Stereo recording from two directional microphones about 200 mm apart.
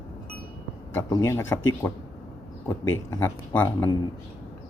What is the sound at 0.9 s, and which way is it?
Speech, 15° left (ahead or behind).